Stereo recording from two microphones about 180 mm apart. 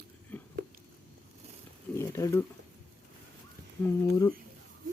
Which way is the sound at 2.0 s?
15° left (ahead or behind).